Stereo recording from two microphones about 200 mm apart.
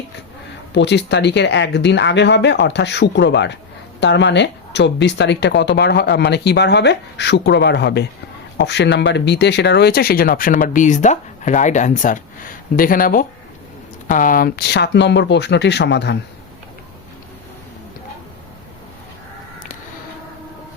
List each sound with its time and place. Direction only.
0.7 s speech: 60° left (ahead or behind)